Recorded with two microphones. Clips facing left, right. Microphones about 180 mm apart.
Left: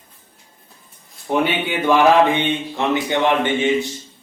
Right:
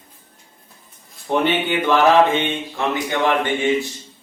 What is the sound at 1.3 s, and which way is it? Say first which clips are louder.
Speech: right 1 dB; 10° left (ahead or behind).